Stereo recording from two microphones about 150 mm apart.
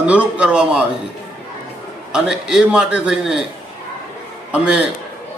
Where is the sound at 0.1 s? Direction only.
10° right (ahead or behind).